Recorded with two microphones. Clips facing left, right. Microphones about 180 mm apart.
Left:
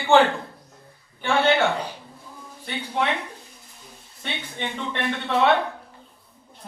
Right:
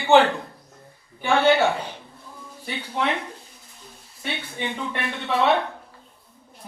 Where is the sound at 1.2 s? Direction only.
10° right (ahead or behind).